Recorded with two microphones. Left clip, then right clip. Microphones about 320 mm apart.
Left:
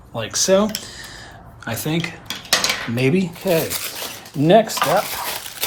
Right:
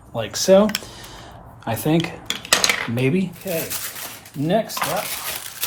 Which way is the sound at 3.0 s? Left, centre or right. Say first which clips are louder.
Left 3 dB; centre.